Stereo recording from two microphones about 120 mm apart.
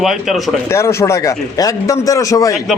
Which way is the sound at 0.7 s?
25° left (ahead or behind).